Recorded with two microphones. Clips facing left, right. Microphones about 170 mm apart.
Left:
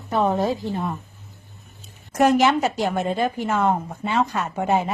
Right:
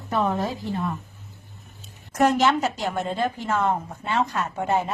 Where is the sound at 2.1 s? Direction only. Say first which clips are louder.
Left 3 dB; 10° left (ahead or behind).